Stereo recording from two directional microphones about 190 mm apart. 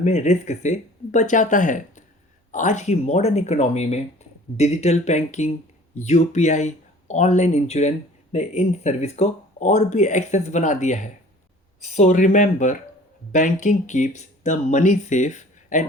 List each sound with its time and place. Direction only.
0.0 s speech: 35° left (ahead or behind)